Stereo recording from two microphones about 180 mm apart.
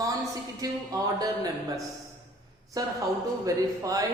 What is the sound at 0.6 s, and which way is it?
Speech, 20° right (ahead or behind).